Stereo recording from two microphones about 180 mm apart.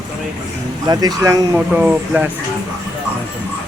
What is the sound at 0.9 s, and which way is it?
Speech, 20° right (ahead or behind).